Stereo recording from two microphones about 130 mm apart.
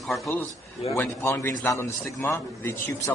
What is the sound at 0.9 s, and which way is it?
A man's voice, 15° left (ahead or behind).